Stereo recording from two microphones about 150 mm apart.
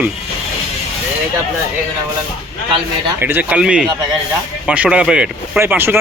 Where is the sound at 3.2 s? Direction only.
15° right (ahead or behind).